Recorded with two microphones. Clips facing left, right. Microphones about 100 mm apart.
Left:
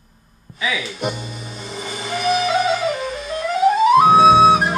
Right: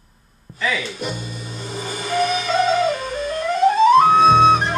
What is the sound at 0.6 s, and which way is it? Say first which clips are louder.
Music: right 1 dB; 5° left (ahead or behind).